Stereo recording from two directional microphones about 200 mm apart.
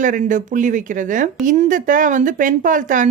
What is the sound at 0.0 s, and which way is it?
Speech, 40° right (ahead or behind).